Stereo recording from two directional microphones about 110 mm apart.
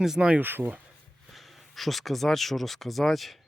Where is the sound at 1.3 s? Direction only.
Centre (ahead or behind).